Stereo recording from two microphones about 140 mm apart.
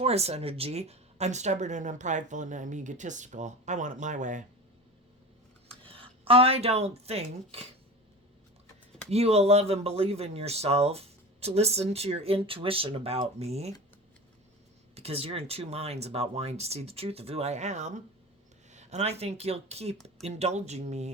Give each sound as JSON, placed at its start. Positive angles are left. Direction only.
{"t": 0.0, "sound": "speech", "side_deg": -50}
{"t": 5.6, "sound": "speech", "side_deg": -40}
{"t": 9.0, "sound": "speech", "side_deg": -50}
{"t": 14.9, "sound": "speech", "side_deg": -45}